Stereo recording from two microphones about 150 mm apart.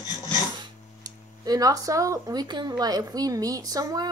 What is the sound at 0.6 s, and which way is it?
Speech, 25° right (ahead or behind).